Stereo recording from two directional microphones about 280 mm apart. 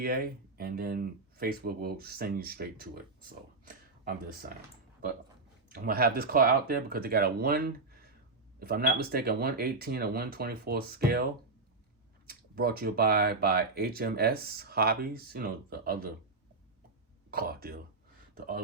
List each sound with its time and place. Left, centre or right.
0.0 s speech: right
5.7 s speech: right
12.3 s speech: right
17.3 s speech: right